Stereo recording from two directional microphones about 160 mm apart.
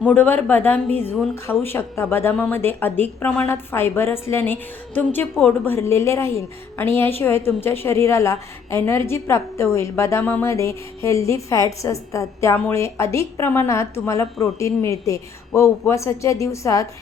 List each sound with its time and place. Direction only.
0.0 s a woman's voice: 10° left (ahead or behind)